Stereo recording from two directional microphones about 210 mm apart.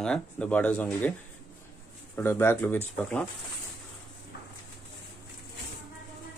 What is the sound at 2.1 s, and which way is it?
Speech, 10° left (ahead or behind).